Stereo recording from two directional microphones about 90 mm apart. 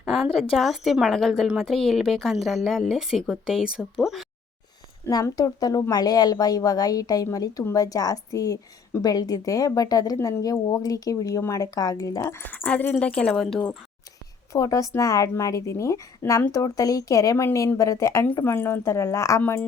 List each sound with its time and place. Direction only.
0.0 s a sound: centre (ahead or behind)
0.5 s a woman's voice: centre (ahead or behind)
5.0 s a woman's voice: 40° left (ahead or behind)
10.2 s a woman's voice: 30° left (ahead or behind)
10.4 s speech: 40° left (ahead or behind); by 13.7 s 10° left (ahead or behind)
14.5 s speech: 35° left (ahead or behind)